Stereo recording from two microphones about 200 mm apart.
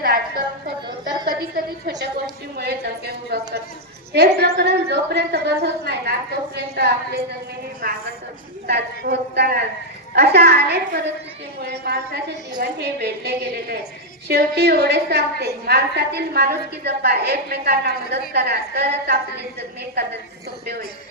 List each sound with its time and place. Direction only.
0.0 s a sound: 50° right (ahead or behind)
1.5 s a woman's voice: 55° right (ahead or behind)
8.6 s a woman's voice: 55° right (ahead or behind)